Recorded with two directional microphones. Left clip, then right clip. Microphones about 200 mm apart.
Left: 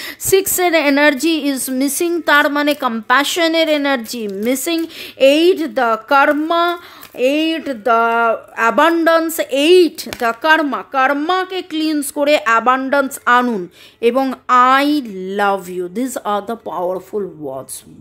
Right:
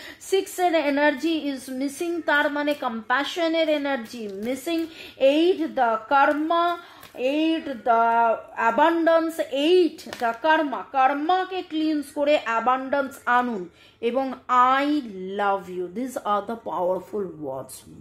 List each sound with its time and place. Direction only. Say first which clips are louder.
0.0 s a woman's voice: left 10 dB; 50° left (ahead or behind)
10.0 s speech: left 8 dB; 35° left (ahead or behind)
10.4 s a woman's voice: left 7 dB; 50° left (ahead or behind); by 17.6 s 30° left (ahead or behind)